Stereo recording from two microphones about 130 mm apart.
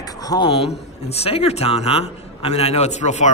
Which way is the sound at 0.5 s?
50° left (ahead or behind).